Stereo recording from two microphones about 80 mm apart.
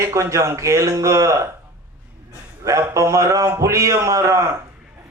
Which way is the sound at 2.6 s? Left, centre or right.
Right.